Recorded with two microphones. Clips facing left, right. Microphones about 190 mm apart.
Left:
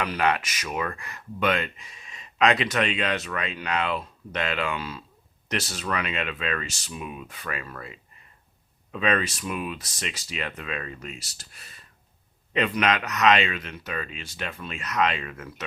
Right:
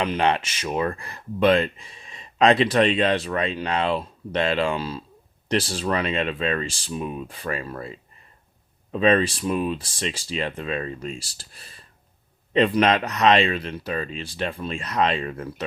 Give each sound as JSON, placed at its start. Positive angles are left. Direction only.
{"t": 0.0, "sound": "speech", "side_deg": -25}